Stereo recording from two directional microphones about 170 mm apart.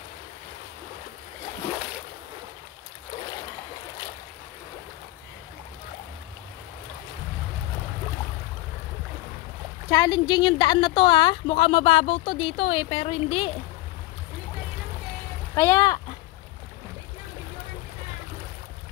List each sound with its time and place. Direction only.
9.8 s speech: 20° left (ahead or behind)
15.5 s speech: 15° left (ahead or behind)